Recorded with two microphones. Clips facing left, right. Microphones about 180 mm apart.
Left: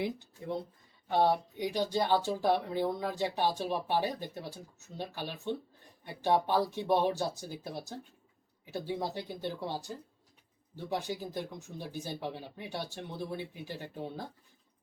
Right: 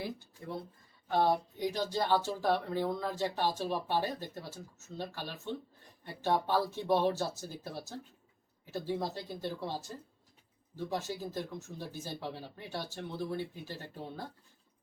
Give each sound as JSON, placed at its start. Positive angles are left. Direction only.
{"t": 1.0, "sound": "speech", "side_deg": 15}